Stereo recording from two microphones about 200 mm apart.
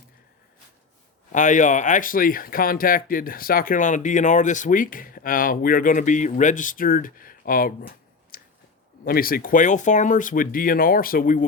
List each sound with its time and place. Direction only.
1.3 s speech: 40° left (ahead or behind)